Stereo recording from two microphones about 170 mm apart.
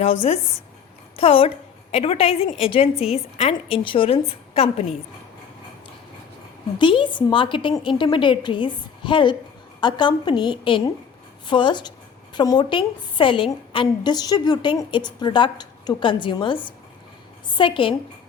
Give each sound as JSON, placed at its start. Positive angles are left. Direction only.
{"t": 0.0, "sound": "a woman's voice", "side_deg": 35}
{"t": 6.7, "sound": "a woman's voice", "side_deg": 30}